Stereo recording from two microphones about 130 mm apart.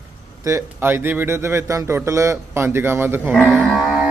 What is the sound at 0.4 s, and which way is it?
A man's voice, 20° right (ahead or behind).